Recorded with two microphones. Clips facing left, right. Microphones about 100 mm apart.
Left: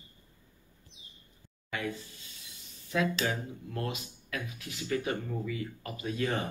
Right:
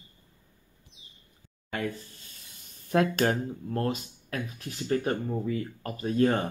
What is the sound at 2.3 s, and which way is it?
Speech, 50° right (ahead or behind).